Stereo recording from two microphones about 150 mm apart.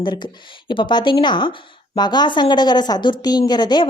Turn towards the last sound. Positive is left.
turn(degrees=30)  # may be behind; listen again after turning